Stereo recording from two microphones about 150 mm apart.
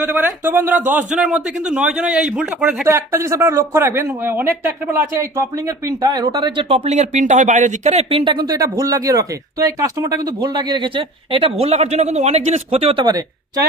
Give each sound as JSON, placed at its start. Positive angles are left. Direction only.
{"t": 0.1, "sound": "a man's voice", "side_deg": -10}
{"t": 2.9, "sound": "speech", "side_deg": -20}
{"t": 6.9, "sound": "speech", "side_deg": -50}